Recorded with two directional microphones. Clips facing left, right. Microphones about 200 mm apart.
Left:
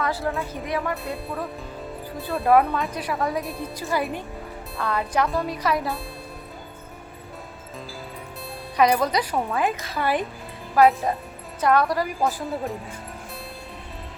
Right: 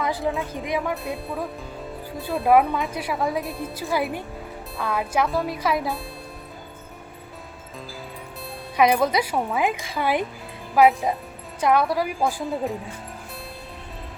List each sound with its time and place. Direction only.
0.0 s a woman's voice: 15° right (ahead or behind)
0.8 s speech: centre (ahead or behind)
2.5 s speech: 15° right (ahead or behind)
8.7 s speech: 10° right (ahead or behind)